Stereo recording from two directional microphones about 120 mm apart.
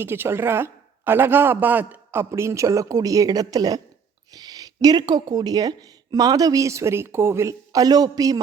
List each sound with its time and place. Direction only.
0.0 s a woman's voice: 20° right (ahead or behind)